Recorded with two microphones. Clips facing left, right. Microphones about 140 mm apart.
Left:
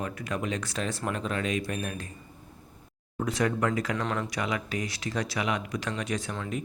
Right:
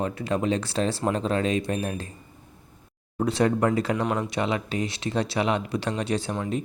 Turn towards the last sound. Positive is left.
turn(degrees=-20)  # may be behind; listen again after turning